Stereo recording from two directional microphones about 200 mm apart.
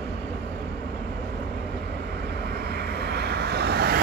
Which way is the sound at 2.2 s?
55° right (ahead or behind).